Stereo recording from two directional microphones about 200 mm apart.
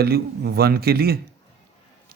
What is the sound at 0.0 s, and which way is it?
A man's voice, 50° right (ahead or behind).